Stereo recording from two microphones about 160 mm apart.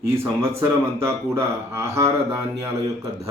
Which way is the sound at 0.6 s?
15° right (ahead or behind).